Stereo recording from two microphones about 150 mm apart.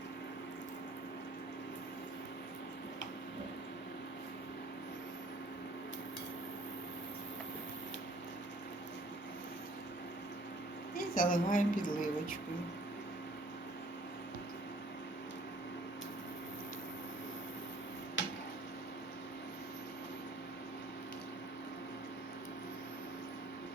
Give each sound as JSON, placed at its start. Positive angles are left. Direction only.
{"t": 10.9, "sound": "a woman's voice", "side_deg": 70}